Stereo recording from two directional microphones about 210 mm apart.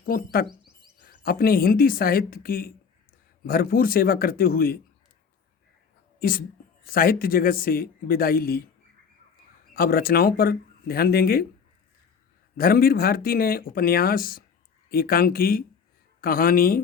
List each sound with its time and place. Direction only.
0.0 s speech: 45° left (ahead or behind)
6.1 s speech: 45° left (ahead or behind)
9.7 s speech: 45° left (ahead or behind)
12.5 s speech: 45° left (ahead or behind)